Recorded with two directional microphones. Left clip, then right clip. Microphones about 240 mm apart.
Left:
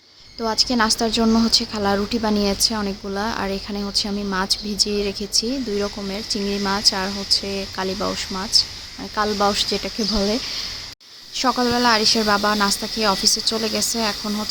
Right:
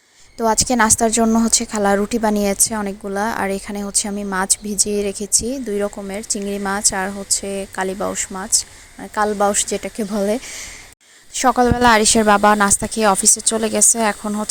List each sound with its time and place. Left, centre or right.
0.3 s a woman's voice: right